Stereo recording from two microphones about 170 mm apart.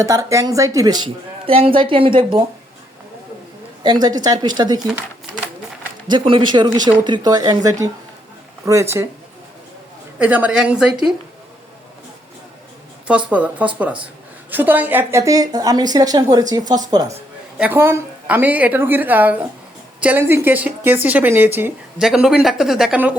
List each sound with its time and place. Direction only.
0.0 s a woman's voice: 20° right (ahead or behind)
3.8 s a woman's voice: 25° right (ahead or behind)
6.1 s a woman's voice: 30° right (ahead or behind)
10.2 s a woman's voice: 10° right (ahead or behind)
13.1 s a woman's voice: 10° right (ahead or behind)
17.6 s a woman's voice: 10° right (ahead or behind)